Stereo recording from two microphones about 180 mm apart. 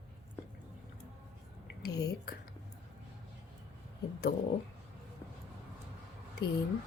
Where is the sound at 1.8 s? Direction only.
65° left (ahead or behind).